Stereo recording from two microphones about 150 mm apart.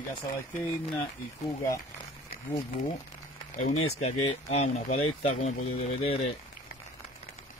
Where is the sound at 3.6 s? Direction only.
45° left (ahead or behind).